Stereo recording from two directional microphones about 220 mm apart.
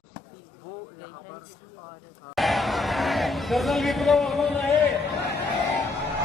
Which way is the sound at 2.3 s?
Centre (ahead or behind).